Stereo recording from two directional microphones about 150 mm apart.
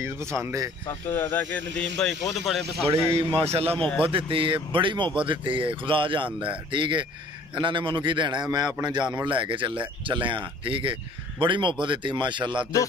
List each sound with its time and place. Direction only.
0.0 s speech: 20° right (ahead or behind)
0.8 s speech: 15° left (ahead or behind)
2.9 s speech: 40° right (ahead or behind)
3.7 s speech: 10° left (ahead or behind)
4.0 s speech: 35° right (ahead or behind)